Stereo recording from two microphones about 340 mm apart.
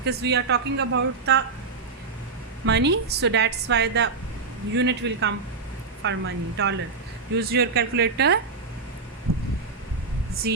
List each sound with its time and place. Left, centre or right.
0.0 s a woman's voice: right
2.6 s a woman's voice: right
9.3 s a sound: right